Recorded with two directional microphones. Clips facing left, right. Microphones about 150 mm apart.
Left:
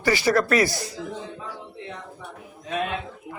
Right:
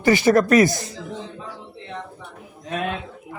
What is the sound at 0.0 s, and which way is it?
Speech, 20° right (ahead or behind).